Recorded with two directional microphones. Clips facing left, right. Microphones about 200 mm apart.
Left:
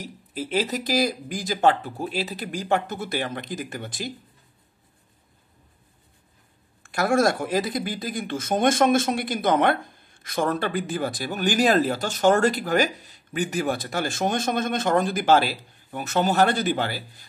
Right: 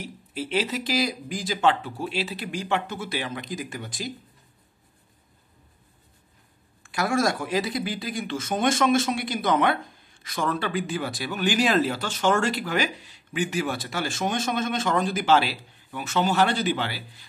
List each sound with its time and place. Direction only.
0.0 s speech: 45° left (ahead or behind)
6.9 s speech: 55° left (ahead or behind)